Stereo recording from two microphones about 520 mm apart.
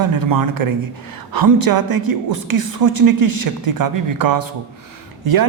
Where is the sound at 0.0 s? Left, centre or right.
Right.